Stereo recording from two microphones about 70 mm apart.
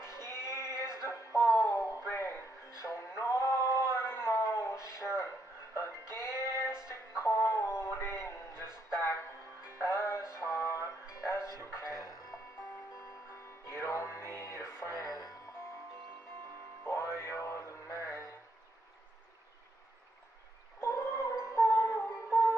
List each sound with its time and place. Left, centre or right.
0.0 s a sound: left
2.8 s music: left
11.6 s a sound: left
13.7 s music: left
15.0 s music: left
16.9 s music: left
20.8 s music: left